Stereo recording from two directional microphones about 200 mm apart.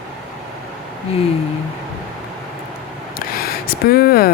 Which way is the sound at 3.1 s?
50° left (ahead or behind).